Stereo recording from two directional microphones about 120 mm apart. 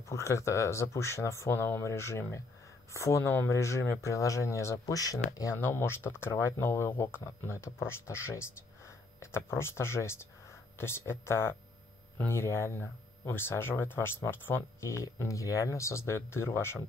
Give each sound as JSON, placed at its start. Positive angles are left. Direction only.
{"t": 0.1, "sound": "speech", "side_deg": 25}